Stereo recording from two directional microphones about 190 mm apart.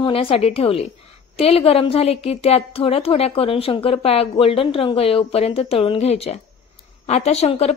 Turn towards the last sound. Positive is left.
turn(degrees=35)  # may be behind; listen again after turning